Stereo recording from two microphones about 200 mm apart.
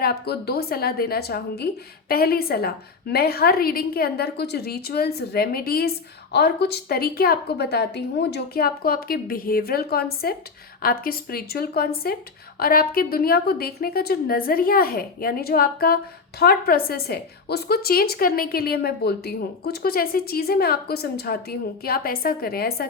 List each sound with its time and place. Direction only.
0.0 s a woman's voice: 50° left (ahead or behind)